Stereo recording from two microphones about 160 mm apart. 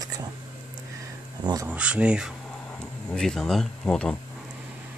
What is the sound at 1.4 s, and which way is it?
Speech, 25° right (ahead or behind).